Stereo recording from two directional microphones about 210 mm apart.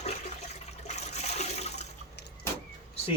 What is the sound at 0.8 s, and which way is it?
Toilet flush, 30° left (ahead or behind).